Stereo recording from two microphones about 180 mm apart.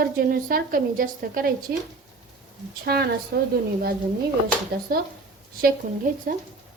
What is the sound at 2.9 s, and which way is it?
Speech, 60° right (ahead or behind).